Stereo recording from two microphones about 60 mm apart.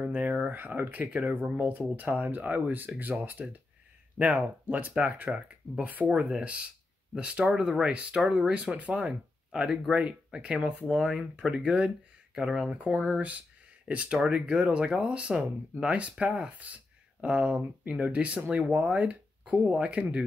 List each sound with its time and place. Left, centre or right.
0.0 s speech: right
11.0 s speech: centre
11.5 s speech: centre